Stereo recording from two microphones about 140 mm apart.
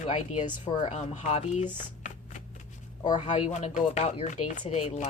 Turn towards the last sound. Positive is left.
turn(degrees=50)  # may be behind; listen again after turning